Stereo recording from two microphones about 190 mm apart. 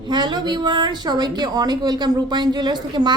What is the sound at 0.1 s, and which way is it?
A woman's voice, 25° right (ahead or behind).